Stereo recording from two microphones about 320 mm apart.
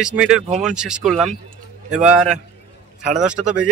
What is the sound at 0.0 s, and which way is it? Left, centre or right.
Speech, centre.